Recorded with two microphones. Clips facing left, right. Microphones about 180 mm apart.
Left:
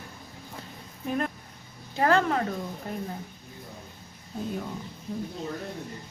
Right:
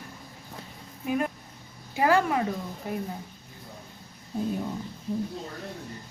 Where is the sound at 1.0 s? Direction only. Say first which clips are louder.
Right 2 dB; 5° right (ahead or behind).